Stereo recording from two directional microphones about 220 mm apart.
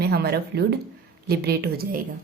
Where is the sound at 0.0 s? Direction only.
45° right (ahead or behind).